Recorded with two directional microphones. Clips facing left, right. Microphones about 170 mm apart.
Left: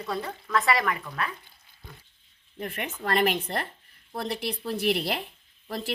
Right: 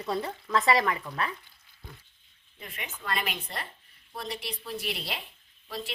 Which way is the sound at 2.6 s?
60° left (ahead or behind).